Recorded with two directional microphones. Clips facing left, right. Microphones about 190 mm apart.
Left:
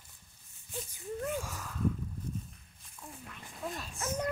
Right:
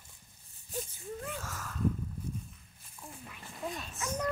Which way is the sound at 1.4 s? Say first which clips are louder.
Even; 15° left (ahead or behind).